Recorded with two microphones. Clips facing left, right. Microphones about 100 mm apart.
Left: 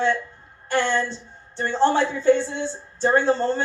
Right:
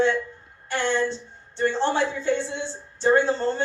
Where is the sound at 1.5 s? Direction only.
40° left (ahead or behind).